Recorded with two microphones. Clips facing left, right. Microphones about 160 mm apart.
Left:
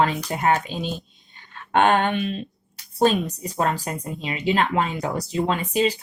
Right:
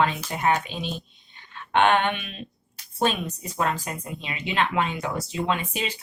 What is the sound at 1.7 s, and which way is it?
Speech, 40° left (ahead or behind).